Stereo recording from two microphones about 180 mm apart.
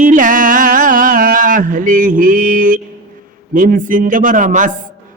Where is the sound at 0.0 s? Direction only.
50° right (ahead or behind).